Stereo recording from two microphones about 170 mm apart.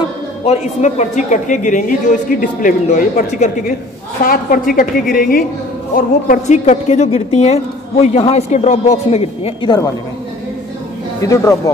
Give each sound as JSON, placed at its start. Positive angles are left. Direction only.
{"t": 0.5, "sound": "a woman's voice", "side_deg": 45}
{"t": 11.2, "sound": "speech", "side_deg": 20}